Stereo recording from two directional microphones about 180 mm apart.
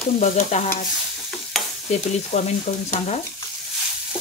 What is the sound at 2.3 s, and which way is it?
Stir, 35° left (ahead or behind).